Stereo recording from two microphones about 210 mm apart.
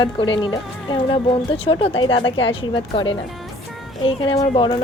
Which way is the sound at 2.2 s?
60° left (ahead or behind).